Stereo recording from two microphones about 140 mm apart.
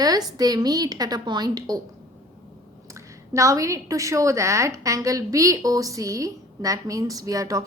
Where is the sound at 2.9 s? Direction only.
25° right (ahead or behind).